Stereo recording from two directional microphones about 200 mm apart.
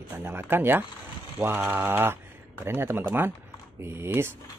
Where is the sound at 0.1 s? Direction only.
10° right (ahead or behind).